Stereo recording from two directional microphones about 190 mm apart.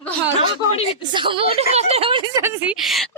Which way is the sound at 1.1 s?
25° right (ahead or behind).